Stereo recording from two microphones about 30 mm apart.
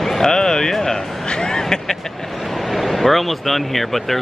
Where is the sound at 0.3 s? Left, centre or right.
Left.